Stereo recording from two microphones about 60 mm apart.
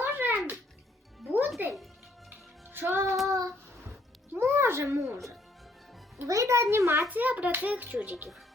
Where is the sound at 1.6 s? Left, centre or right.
Right.